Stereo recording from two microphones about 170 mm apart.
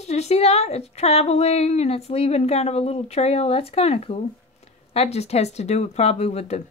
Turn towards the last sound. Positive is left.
turn(degrees=40)  # may be behind; listen again after turning